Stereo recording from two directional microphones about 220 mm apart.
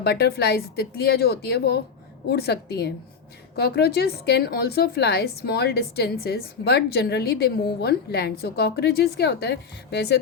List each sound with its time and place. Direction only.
0.0 s a woman's voice: 50° left (ahead or behind)